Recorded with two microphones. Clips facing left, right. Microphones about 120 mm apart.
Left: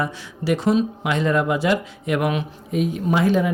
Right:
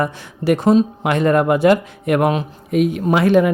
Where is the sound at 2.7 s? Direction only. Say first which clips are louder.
Right 5 dB; 70° right (ahead or behind).